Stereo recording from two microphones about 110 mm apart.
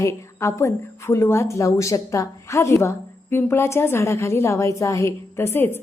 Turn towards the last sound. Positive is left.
turn(degrees=20)  # may be behind; listen again after turning